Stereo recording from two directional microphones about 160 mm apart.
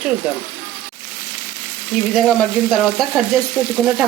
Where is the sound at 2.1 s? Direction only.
5° left (ahead or behind).